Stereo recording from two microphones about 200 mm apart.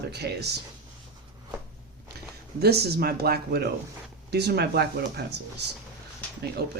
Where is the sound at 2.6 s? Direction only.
50° right (ahead or behind).